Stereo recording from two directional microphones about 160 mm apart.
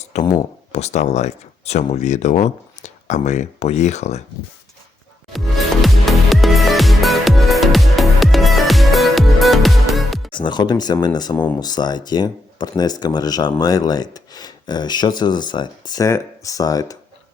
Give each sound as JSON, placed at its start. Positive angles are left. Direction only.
{"t": 0.0, "sound": "a sound", "side_deg": 45}
{"t": 0.7, "sound": "speech", "side_deg": 45}
{"t": 5.3, "sound": "music", "side_deg": 0}
{"t": 10.3, "sound": "speech", "side_deg": 30}